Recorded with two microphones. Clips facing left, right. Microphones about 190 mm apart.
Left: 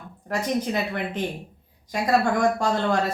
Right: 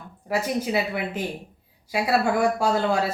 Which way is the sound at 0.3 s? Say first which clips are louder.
Even; 10° right (ahead or behind).